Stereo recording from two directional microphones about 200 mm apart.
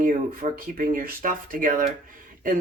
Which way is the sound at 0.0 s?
40° right (ahead or behind).